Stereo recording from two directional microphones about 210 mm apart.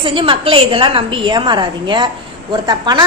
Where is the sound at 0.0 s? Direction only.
25° right (ahead or behind).